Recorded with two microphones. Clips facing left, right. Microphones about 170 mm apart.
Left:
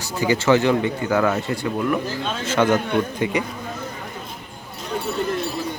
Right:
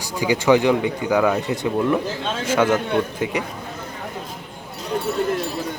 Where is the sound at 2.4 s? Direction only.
10° right (ahead or behind).